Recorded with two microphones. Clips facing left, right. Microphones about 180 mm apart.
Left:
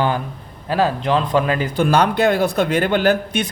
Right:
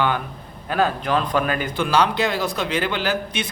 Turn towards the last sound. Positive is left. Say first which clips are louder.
# left 7 dB
turn(degrees=50)  # may be behind; listen again after turning